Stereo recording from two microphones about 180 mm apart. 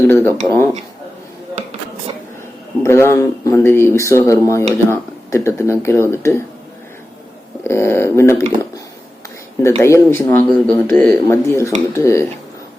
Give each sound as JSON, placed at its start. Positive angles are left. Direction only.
{"t": 0.0, "sound": "a sound", "side_deg": 10}
{"t": 0.5, "sound": "speech", "side_deg": 15}
{"t": 2.8, "sound": "speech", "side_deg": 15}
{"t": 7.7, "sound": "speech", "side_deg": 15}
{"t": 9.6, "sound": "speech", "side_deg": 15}